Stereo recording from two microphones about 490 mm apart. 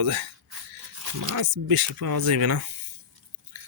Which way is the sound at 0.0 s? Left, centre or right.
Right.